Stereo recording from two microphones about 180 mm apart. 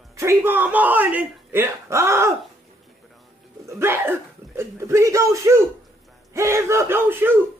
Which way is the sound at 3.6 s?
15° right (ahead or behind).